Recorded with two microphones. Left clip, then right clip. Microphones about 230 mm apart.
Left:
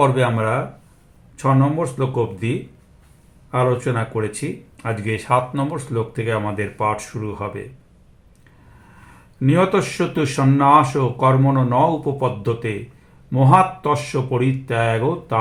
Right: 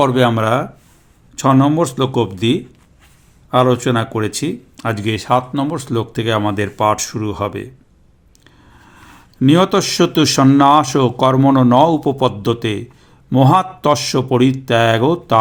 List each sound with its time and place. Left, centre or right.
0.0 s speech: right
3.5 s speech: right
9.4 s speech: right